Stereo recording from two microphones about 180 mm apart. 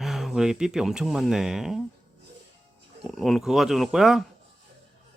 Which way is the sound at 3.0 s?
Centre (ahead or behind).